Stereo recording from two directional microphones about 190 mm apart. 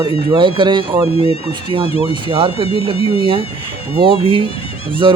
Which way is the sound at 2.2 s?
25° right (ahead or behind).